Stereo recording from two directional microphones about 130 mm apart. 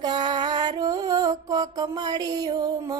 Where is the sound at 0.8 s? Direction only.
30° right (ahead or behind).